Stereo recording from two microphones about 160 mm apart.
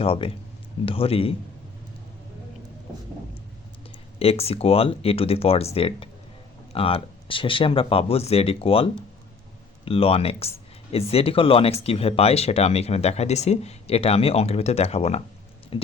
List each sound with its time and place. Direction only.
0.0 s speech: 35° left (ahead or behind)
4.2 s speech: 40° left (ahead or behind)